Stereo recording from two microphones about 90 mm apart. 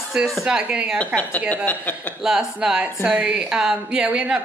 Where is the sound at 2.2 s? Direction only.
5° right (ahead or behind).